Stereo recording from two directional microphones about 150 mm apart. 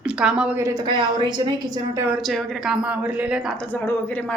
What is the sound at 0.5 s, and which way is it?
Speech, 20° right (ahead or behind).